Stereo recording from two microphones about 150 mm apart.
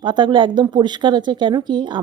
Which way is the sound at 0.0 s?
30° right (ahead or behind).